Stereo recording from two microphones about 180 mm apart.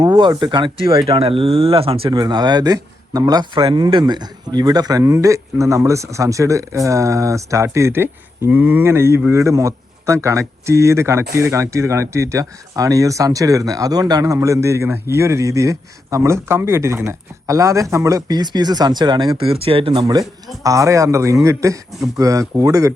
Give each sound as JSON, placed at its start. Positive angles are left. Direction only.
{"t": 0.0, "sound": "a man's voice", "side_deg": -25}